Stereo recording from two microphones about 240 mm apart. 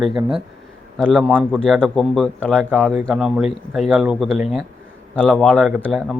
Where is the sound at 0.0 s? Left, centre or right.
Centre.